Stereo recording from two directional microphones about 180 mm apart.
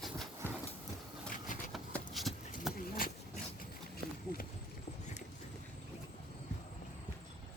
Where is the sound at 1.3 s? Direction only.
45° left (ahead or behind).